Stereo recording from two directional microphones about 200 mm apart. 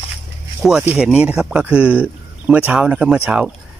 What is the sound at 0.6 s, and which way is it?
Speech, 5° right (ahead or behind).